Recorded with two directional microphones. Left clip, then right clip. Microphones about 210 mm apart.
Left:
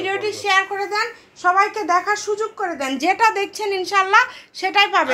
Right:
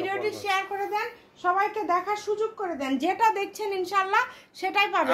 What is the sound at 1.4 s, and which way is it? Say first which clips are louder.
A woman's voice: left 8 dB; 25° left (ahead or behind).